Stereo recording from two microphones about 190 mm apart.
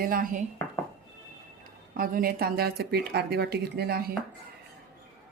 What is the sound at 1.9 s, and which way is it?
A woman's voice, 50° right (ahead or behind).